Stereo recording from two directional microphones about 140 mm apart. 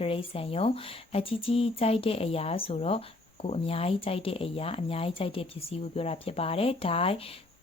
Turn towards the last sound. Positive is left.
turn(degrees=45)  # may be behind; listen again after turning